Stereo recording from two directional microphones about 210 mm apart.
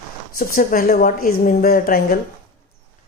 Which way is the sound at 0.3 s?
45° left (ahead or behind).